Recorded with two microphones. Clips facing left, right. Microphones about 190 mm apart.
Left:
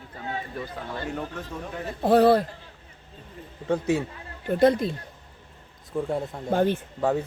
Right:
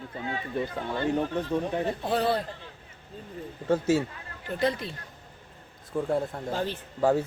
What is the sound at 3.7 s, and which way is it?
Speech, centre (ahead or behind).